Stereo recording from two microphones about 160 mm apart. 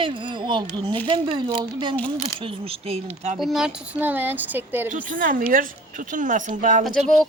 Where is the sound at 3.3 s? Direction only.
Centre (ahead or behind).